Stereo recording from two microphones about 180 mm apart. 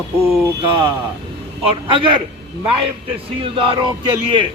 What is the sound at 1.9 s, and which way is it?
A man's voice, 30° right (ahead or behind).